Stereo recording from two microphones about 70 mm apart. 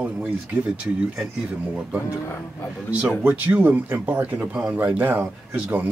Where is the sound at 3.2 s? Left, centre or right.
Right.